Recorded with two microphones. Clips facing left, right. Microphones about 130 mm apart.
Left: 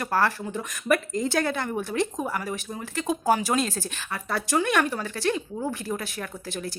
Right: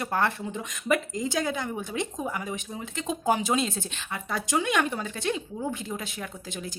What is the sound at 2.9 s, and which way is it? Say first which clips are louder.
A woman's voice: left 3 dB; 20° right (ahead or behind).